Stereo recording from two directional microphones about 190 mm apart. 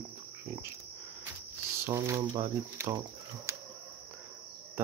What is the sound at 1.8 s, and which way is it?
Speech, 15° right (ahead or behind).